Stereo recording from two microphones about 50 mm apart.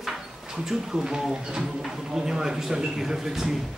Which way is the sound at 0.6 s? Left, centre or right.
Centre.